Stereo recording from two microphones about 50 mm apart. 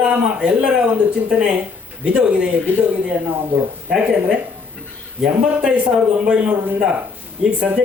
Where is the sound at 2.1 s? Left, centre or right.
Right.